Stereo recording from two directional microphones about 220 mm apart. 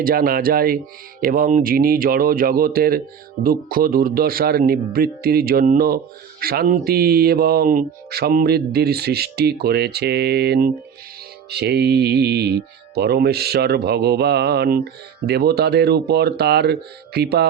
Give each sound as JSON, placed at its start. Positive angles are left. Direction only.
{"t": 0.0, "sound": "speech", "side_deg": -40}